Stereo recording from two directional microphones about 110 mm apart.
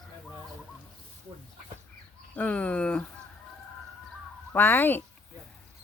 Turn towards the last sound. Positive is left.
turn(degrees=20)  # may be behind; listen again after turning